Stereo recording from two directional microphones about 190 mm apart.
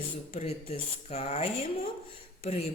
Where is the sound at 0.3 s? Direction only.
35° left (ahead or behind).